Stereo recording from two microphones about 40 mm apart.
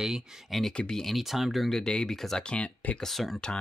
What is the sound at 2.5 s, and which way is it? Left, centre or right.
Speech, left.